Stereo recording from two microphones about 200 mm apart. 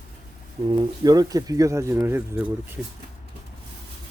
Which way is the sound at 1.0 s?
20° right (ahead or behind).